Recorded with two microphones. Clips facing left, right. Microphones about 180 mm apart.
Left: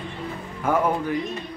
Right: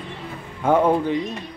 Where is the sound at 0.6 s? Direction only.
25° right (ahead or behind).